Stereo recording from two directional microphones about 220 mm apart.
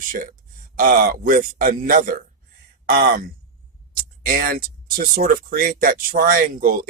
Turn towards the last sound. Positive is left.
turn(degrees=-40)  # may be behind; listen again after turning